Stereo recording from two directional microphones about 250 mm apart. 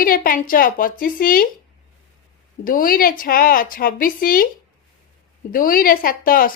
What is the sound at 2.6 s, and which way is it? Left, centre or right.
A woman's voice, left.